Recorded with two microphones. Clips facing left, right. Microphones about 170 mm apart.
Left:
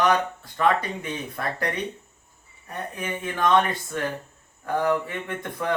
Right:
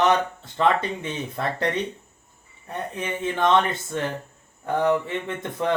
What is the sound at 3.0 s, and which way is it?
Speech, 25° right (ahead or behind).